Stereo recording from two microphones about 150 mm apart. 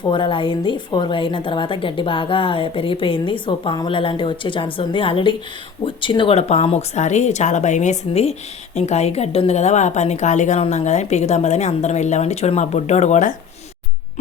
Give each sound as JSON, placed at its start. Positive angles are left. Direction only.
{"t": 0.1, "sound": "a woman's voice", "side_deg": 35}